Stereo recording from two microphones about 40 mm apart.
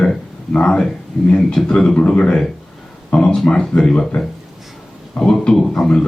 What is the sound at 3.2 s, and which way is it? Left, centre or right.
Speech, centre.